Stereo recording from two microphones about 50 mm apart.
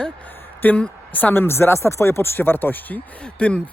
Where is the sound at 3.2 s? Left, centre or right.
Left.